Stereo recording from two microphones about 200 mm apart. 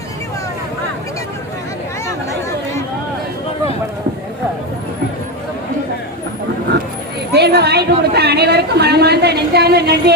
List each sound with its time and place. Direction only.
7.3 s a woman's voice: 55° right (ahead or behind)